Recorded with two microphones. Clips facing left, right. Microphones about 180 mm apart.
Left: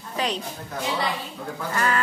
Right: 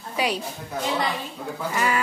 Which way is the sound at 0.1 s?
10° right (ahead or behind).